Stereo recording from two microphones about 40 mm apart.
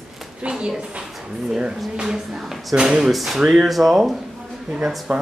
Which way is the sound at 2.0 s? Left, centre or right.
Centre.